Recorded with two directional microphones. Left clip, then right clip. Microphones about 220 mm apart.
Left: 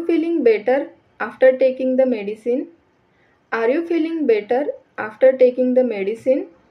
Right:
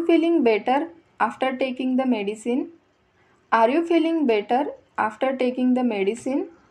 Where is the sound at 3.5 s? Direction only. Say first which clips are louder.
Even; 15° right (ahead or behind).